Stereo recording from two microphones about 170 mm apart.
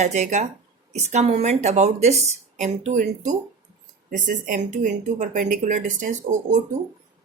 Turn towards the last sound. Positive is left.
turn(degrees=-45)  # may be behind; listen again after turning